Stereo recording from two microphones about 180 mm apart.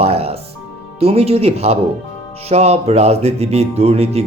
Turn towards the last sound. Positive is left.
turn(degrees=-35)  # may be behind; listen again after turning